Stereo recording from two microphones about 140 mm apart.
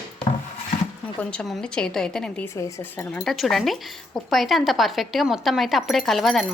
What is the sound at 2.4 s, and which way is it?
Speech, 15° left (ahead or behind).